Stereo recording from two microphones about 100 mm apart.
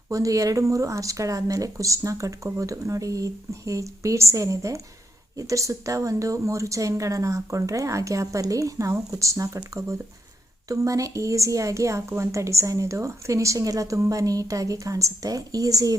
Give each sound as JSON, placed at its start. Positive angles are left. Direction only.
{"t": 0.1, "sound": "a woman's voice", "side_deg": -35}
{"t": 10.7, "sound": "a woman's voice", "side_deg": -35}